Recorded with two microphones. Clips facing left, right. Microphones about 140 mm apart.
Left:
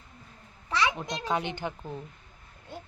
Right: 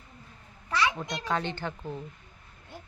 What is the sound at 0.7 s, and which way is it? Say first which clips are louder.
A child's voice: even; 20° left (ahead or behind).